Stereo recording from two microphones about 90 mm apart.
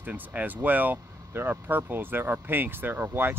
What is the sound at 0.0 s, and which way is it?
Speech, 20° right (ahead or behind).